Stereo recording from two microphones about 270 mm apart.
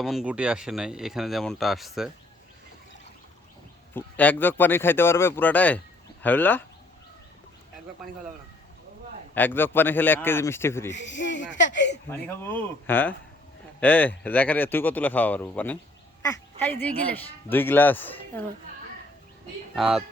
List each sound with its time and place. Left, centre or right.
0.0 s speech: centre
3.9 s speech: centre
8.0 s speech: centre
9.3 s speech: centre
11.2 s speech: left
12.1 s speech: centre
19.7 s speech: centre